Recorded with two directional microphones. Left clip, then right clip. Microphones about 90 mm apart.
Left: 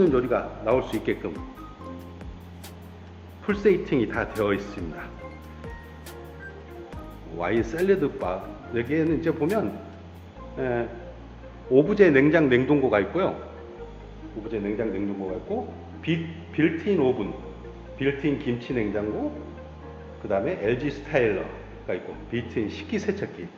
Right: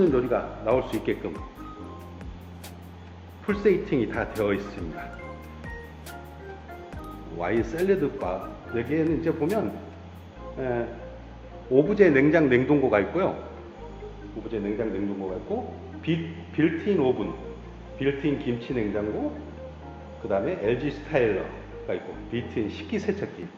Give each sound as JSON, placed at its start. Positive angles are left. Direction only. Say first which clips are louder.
{"t": 0.0, "sound": "a man's voice", "louder": "left 1 dB", "side_deg": 15}
{"t": 3.4, "sound": "a man's voice", "louder": "left 1 dB", "side_deg": 15}
{"t": 7.3, "sound": "a man's voice", "louder": "left 1 dB", "side_deg": 15}
{"t": 10.6, "sound": "a man's voice", "louder": "left 2 dB", "side_deg": 20}
{"t": 14.5, "sound": "a man's voice", "louder": "left 1 dB", "side_deg": 15}
{"t": 20.2, "sound": "a man's voice", "louder": "even", "side_deg": 15}